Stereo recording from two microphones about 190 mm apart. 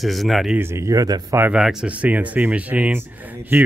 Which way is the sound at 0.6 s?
15° right (ahead or behind).